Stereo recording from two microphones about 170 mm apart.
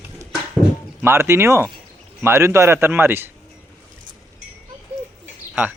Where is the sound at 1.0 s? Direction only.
15° right (ahead or behind).